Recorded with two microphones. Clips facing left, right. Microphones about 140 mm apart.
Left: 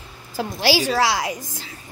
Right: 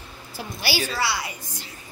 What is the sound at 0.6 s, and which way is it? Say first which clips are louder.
Speech: left 7 dB; 90° left.